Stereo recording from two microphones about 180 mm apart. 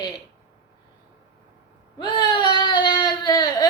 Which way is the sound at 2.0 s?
25° left (ahead or behind).